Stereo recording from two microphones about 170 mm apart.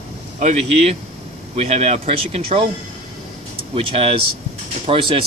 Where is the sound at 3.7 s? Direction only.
35° right (ahead or behind).